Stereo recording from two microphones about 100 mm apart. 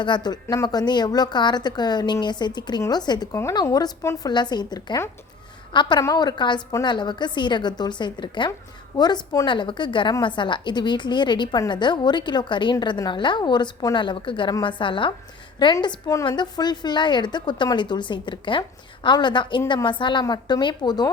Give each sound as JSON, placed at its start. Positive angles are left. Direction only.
{"t": 0.0, "sound": "a woman's voice", "side_deg": 45}
{"t": 4.0, "sound": "a woman's voice", "side_deg": 30}
{"t": 4.3, "sound": "a woman's voice", "side_deg": 45}
{"t": 6.0, "sound": "a woman's voice", "side_deg": 40}
{"t": 9.5, "sound": "a woman's voice", "side_deg": 50}